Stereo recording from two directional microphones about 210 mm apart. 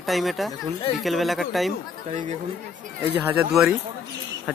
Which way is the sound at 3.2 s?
10° right (ahead or behind).